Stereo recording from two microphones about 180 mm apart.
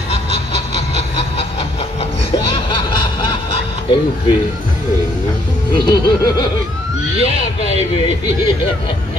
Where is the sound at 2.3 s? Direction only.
25° left (ahead or behind).